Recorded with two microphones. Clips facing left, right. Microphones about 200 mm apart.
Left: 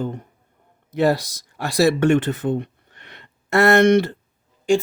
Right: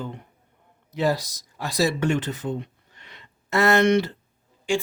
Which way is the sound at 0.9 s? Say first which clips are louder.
Left 5 dB; 70° left (ahead or behind).